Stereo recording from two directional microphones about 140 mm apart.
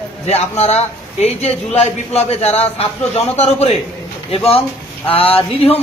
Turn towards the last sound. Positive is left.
turn(degrees=40)  # may be behind; listen again after turning